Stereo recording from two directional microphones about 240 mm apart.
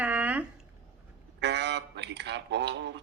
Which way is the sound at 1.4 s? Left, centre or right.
Right.